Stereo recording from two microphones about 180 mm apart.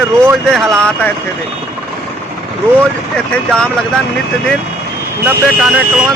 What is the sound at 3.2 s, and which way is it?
Speech, 5° left (ahead or behind).